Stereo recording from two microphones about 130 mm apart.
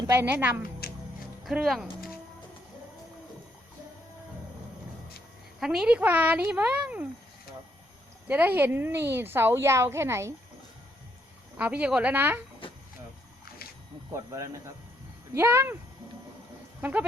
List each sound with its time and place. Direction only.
0.1 s a woman's voice: 15° right (ahead or behind)
1.5 s speech: centre (ahead or behind)
5.5 s a woman's voice: 5° right (ahead or behind)
8.3 s a woman's voice: 15° right (ahead or behind)
11.5 s a woman's voice: 10° right (ahead or behind)
12.6 s a sound: 40° left (ahead or behind)
14.1 s speech: 25° right (ahead or behind)
16.8 s a woman's voice: 10° right (ahead or behind)